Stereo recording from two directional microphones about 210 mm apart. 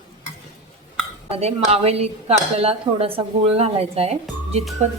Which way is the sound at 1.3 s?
30° right (ahead or behind).